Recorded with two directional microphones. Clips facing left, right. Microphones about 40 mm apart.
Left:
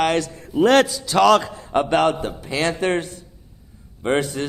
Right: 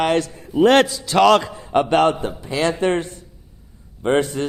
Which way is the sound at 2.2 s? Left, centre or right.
Left.